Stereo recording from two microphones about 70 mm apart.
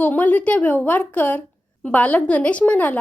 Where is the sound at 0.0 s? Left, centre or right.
Left.